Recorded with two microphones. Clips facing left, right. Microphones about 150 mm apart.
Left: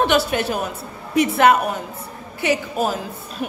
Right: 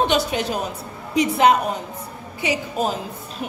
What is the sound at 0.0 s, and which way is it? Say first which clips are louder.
A woman's voice: left 2 dB; 20° right (ahead or behind).